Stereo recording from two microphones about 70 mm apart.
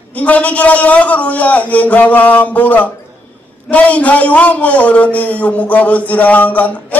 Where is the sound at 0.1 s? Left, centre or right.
Left.